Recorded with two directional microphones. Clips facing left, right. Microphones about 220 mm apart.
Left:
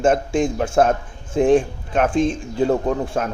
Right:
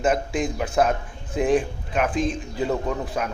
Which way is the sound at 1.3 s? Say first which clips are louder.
Left 5 dB; 30° left (ahead or behind).